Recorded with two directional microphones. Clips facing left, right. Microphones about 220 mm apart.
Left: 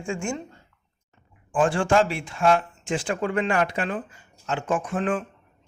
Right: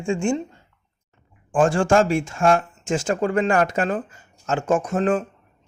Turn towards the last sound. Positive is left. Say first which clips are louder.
# right 5 dB
turn(degrees=-40)  # may be behind; listen again after turning